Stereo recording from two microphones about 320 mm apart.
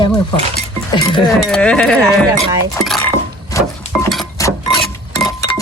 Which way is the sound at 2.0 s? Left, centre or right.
Centre.